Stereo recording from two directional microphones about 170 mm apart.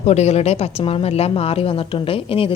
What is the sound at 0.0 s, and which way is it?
Speech, 40° left (ahead or behind).